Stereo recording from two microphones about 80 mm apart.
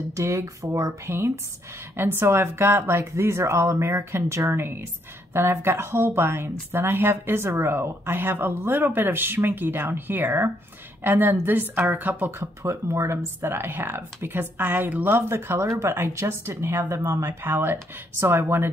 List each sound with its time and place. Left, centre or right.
0.1 s speech: right
1.0 s speech: right
12.3 s speech: right